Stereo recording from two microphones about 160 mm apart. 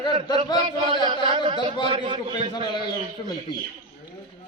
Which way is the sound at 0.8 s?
30° right (ahead or behind).